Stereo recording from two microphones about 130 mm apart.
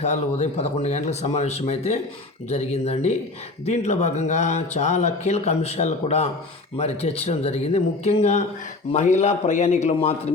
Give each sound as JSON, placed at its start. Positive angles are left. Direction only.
{"t": 0.0, "sound": "speech", "side_deg": 60}